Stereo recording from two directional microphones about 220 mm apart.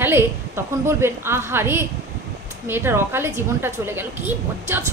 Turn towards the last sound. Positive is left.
turn(degrees=-10)  # may be behind; listen again after turning